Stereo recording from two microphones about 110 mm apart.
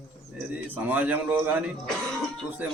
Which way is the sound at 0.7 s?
15° right (ahead or behind).